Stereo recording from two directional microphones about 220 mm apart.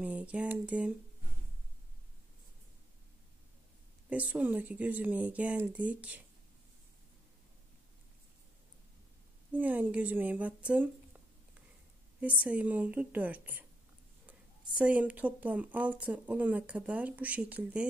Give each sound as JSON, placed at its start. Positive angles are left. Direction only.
{"t": 0.0, "sound": "a sound", "side_deg": -5}
{"t": 4.1, "sound": "speech", "side_deg": -5}
{"t": 9.5, "sound": "speech", "side_deg": -10}
{"t": 14.8, "sound": "speech", "side_deg": -5}